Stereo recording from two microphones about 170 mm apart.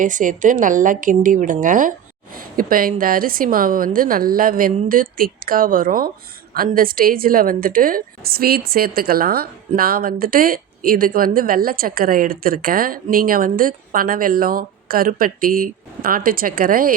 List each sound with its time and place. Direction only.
0.0 s a woman's voice: 50° right (ahead or behind)